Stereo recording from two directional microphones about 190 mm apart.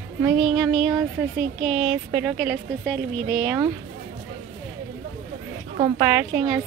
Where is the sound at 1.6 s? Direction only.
10° right (ahead or behind).